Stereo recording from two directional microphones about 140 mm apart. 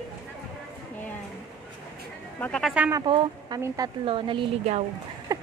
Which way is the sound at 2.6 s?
10° right (ahead or behind).